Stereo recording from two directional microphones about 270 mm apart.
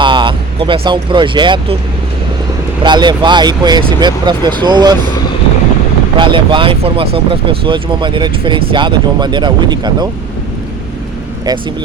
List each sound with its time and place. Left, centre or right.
0.0 s speech: centre
2.8 s speech: centre
6.1 s speech: centre